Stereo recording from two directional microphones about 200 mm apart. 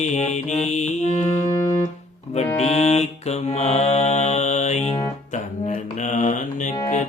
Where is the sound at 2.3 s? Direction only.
35° left (ahead or behind).